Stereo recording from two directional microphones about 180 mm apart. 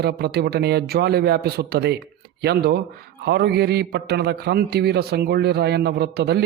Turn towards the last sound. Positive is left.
turn(degrees=-65)  # may be behind; listen again after turning